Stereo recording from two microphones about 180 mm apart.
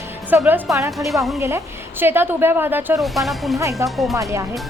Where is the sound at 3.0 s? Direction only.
Centre (ahead or behind).